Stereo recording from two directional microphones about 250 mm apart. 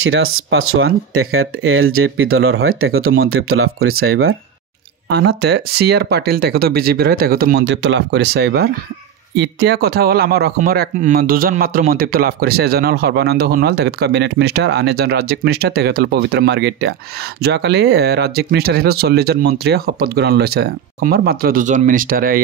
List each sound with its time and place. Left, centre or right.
0.0 s speech: right
5.1 s a man's voice: right